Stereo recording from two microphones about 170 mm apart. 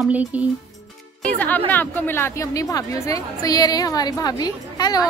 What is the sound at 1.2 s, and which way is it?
A woman's voice, 10° left (ahead or behind).